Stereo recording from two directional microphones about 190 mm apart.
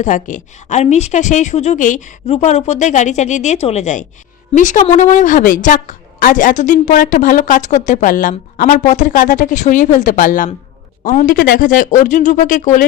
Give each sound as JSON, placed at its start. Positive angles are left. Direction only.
{"t": 0.0, "sound": "a woman's voice", "side_deg": 40}